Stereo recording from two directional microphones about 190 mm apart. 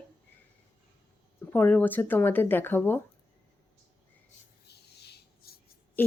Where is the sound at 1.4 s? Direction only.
10° left (ahead or behind).